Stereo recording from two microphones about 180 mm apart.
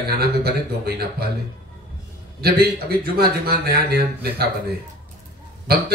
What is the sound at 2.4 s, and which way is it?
A man's voice, 60° right (ahead or behind).